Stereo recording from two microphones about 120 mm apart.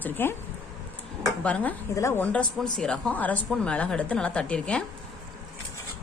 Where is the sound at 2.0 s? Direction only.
25° left (ahead or behind).